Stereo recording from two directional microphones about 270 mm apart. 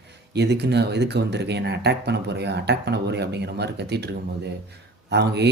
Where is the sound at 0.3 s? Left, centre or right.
Right.